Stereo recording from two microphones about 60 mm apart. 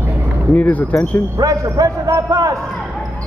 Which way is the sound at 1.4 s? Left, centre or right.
Right.